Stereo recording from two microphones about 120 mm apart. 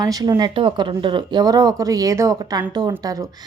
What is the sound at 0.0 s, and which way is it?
A woman's voice, 30° right (ahead or behind).